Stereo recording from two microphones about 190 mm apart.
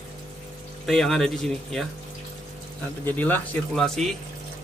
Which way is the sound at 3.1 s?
10° left (ahead or behind).